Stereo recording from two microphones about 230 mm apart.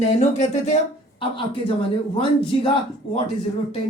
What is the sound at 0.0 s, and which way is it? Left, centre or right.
Speech, left.